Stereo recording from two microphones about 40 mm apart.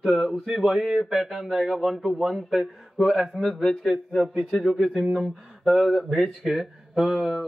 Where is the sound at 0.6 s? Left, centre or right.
Centre.